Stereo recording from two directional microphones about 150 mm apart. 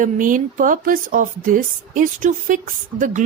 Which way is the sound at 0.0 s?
60° right (ahead or behind).